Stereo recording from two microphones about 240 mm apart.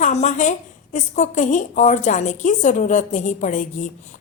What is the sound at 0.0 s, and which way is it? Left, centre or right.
A woman's voice, left.